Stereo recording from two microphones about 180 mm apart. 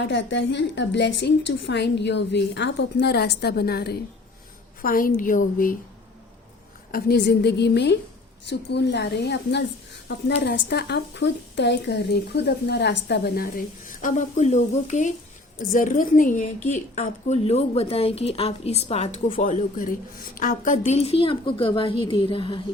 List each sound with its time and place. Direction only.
0.0 s a woman's voice: 85° left; by 5.7 s 50° left (ahead or behind)
6.9 s a woman's voice: 65° left (ahead or behind); by 22.6 s 30° left (ahead or behind)